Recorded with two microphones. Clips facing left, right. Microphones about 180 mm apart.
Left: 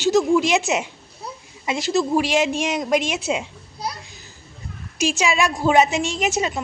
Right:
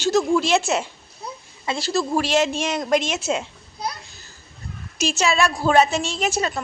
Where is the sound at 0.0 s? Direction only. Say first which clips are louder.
Left 2 dB; 15° left (ahead or behind).